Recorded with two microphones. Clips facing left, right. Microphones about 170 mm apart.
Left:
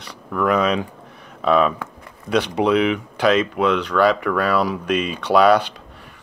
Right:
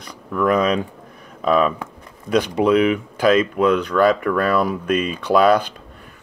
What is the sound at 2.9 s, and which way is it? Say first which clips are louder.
Speech: right 2 dB; 45° right (ahead or behind).